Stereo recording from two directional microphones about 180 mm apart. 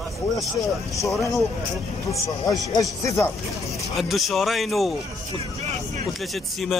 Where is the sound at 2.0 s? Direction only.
20° left (ahead or behind).